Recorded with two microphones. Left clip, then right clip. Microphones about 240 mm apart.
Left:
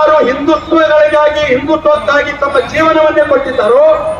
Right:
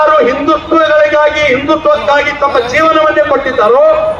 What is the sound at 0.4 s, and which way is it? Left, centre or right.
A man's voice, centre.